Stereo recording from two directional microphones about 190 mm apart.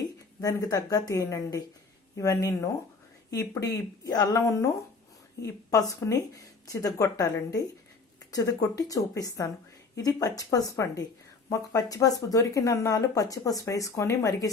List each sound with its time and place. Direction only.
0.4 s speech: 15° left (ahead or behind)